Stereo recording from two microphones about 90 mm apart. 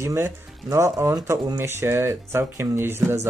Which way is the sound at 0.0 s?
30° right (ahead or behind).